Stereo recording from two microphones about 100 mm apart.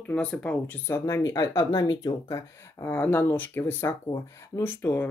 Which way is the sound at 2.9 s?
20° left (ahead or behind).